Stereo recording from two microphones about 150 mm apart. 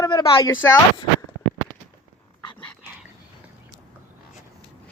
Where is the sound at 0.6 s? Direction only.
15° left (ahead or behind).